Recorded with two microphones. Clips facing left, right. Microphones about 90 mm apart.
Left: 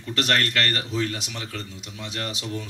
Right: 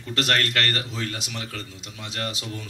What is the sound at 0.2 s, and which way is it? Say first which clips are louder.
A man's voice: even; 30° left (ahead or behind).